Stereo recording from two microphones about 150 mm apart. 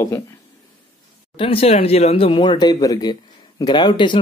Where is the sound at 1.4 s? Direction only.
40° left (ahead or behind).